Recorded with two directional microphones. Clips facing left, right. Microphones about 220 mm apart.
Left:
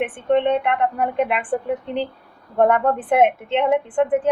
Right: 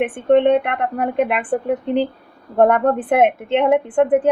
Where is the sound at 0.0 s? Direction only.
50° right (ahead or behind).